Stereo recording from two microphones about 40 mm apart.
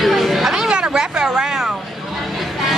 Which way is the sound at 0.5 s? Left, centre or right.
Centre.